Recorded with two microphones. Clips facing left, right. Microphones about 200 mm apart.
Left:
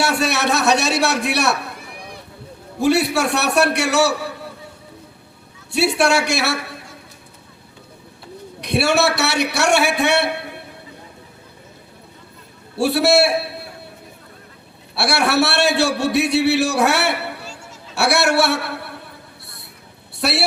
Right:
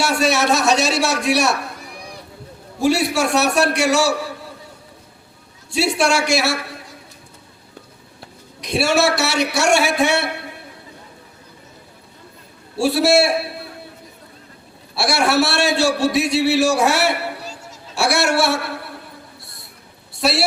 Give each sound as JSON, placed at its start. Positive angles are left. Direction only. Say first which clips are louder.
{"t": 0.0, "sound": "a man's voice", "louder": "right 1 dB", "side_deg": 60}
{"t": 2.8, "sound": "a man's voice", "louder": "left 1 dB", "side_deg": 60}
{"t": 5.7, "sound": "a man's voice", "louder": "left 1 dB", "side_deg": 60}
{"t": 8.6, "sound": "a man's voice", "louder": "even", "side_deg": 60}
{"t": 12.7, "sound": "a man's voice", "louder": "even", "side_deg": 60}
{"t": 14.9, "sound": "a man's voice", "louder": "even", "side_deg": 60}
{"t": 17.4, "sound": "a sound", "louder": "right 2 dB", "side_deg": -40}
{"t": 17.9, "sound": "a man's voice", "louder": "left 1 dB", "side_deg": 60}
{"t": 20.1, "sound": "speech", "louder": "right 2 dB", "side_deg": 60}